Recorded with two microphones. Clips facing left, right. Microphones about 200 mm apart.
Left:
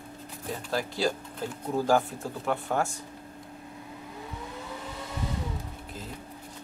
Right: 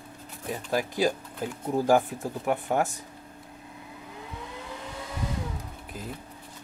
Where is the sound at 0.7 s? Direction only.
15° right (ahead or behind).